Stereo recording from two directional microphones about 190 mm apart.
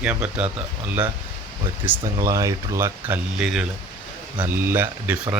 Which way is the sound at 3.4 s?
5° right (ahead or behind).